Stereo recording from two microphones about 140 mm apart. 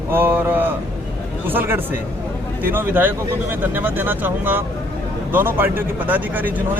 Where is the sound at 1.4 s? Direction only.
15° right (ahead or behind).